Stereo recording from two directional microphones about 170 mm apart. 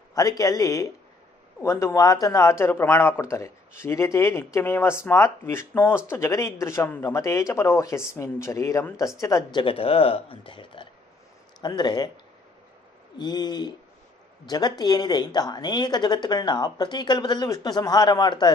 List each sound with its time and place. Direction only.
0.1 s a woman's voice: 20° left (ahead or behind)
13.2 s a woman's voice: 25° left (ahead or behind)